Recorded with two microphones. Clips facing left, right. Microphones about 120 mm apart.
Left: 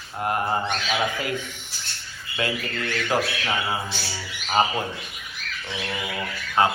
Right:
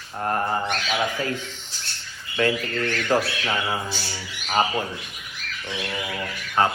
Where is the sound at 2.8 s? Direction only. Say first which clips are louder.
Right 2 dB; 15° left (ahead or behind).